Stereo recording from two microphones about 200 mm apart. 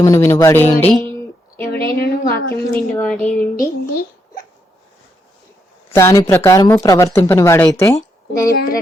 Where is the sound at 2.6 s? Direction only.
5° left (ahead or behind).